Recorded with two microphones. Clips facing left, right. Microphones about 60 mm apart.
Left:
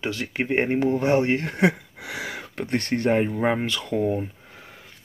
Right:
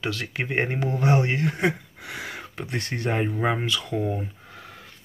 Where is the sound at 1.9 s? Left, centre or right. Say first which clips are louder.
Left 3 dB; left.